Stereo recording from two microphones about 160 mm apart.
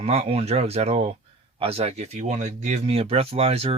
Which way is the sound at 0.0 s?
40° right (ahead or behind).